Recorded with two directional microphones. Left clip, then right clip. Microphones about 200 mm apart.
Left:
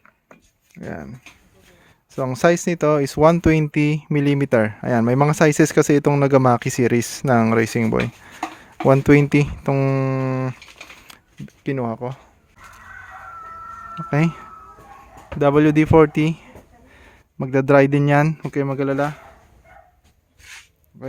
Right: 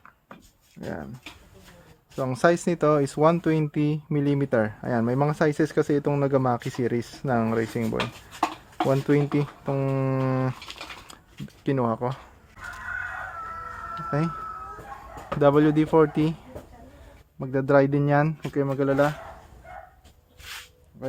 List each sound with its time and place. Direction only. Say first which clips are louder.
0.8 s speech: left 2 dB; 35° left (ahead or behind)
2.1 s speech: left 4 dB; 30° left (ahead or behind)
11.6 s speech: even; 25° left (ahead or behind)
14.1 s speech: left 7 dB; 40° left (ahead or behind)
15.4 s speech: left 4 dB; 30° left (ahead or behind); by 19.1 s 50° left (ahead or behind)